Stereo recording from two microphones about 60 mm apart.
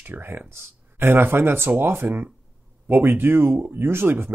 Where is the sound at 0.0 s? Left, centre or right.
Right.